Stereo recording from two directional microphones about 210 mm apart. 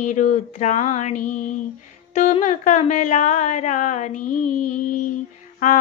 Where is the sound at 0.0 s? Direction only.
35° left (ahead or behind).